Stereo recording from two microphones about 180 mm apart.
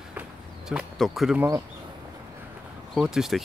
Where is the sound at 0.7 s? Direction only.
Centre (ahead or behind).